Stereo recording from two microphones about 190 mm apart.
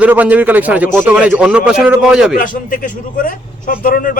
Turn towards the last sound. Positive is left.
turn(degrees=45)  # may be behind; listen again after turning